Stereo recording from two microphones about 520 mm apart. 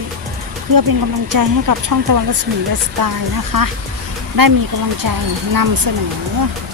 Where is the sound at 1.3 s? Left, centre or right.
Right.